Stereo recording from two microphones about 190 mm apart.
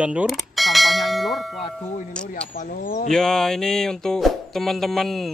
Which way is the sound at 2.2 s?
5° left (ahead or behind).